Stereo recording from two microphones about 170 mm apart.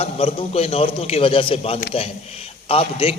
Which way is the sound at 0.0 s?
35° left (ahead or behind).